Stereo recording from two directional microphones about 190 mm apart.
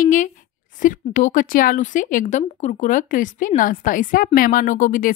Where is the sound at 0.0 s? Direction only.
40° left (ahead or behind).